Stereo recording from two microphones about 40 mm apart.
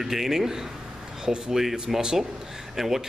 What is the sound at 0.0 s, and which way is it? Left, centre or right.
A man's voice, centre.